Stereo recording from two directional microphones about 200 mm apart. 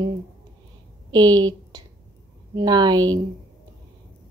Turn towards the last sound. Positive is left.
turn(degrees=-20)  # may be behind; listen again after turning